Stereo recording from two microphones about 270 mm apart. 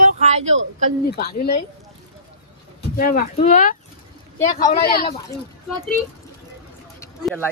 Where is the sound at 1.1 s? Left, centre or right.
Left.